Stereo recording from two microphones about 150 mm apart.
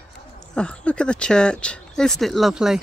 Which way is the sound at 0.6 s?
5° left (ahead or behind).